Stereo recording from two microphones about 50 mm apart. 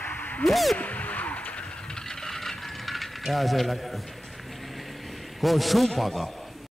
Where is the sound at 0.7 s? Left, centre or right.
Left.